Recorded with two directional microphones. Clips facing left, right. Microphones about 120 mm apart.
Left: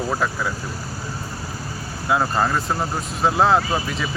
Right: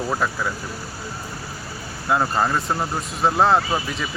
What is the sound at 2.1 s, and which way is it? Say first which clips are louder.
Speech: even; centre (ahead or behind).